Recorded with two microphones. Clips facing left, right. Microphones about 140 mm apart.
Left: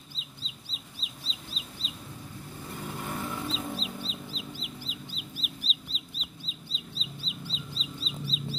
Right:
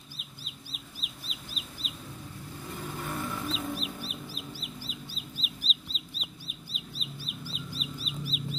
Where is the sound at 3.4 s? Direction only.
25° left (ahead or behind).